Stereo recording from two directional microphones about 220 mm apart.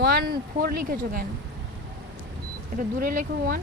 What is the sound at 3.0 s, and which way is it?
Speech, 40° right (ahead or behind).